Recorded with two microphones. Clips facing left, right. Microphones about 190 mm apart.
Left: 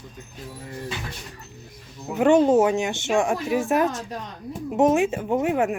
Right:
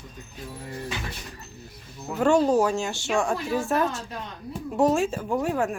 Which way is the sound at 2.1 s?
20° left (ahead or behind).